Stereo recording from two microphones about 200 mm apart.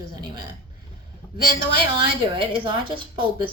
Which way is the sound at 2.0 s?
25° right (ahead or behind).